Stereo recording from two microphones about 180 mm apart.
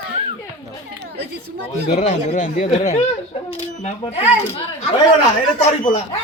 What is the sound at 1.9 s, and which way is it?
Speech, 40° left (ahead or behind).